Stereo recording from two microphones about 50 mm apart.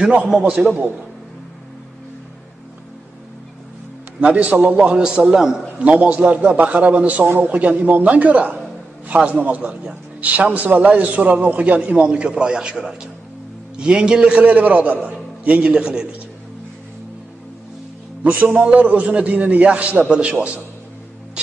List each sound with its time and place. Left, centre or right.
0.3 s a man's voice: centre
4.2 s a man's voice: right
5.8 s a man's voice: right
18.2 s a man's voice: right